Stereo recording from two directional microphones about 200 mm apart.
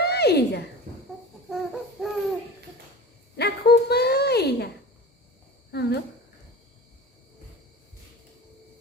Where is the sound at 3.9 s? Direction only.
55° left (ahead or behind).